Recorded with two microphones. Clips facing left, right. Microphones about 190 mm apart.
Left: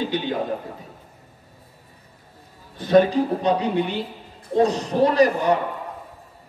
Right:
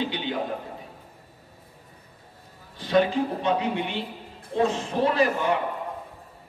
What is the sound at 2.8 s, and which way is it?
A man's voice, 45° left (ahead or behind).